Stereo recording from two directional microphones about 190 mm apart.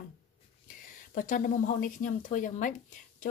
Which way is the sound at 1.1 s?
45° left (ahead or behind).